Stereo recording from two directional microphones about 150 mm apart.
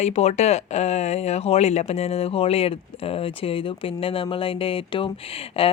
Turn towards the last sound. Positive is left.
turn(degrees=40)  # may be behind; listen again after turning